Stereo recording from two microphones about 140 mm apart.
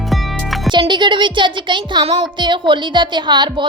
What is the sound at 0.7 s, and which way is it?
Music, 35° right (ahead or behind).